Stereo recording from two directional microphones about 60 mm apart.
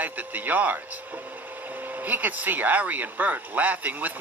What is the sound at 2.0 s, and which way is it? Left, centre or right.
Speech, right.